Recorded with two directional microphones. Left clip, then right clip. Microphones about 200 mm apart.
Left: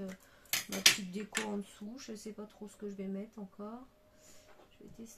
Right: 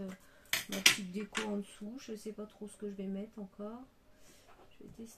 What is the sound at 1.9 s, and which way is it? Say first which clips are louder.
Speech: right 3 dB; 15° left (ahead or behind).